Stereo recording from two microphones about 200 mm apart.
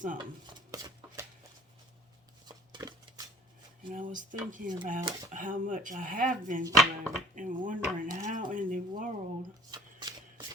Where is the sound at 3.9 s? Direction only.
40° right (ahead or behind).